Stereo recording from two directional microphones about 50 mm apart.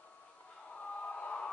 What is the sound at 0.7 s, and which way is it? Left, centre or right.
Crowd, left.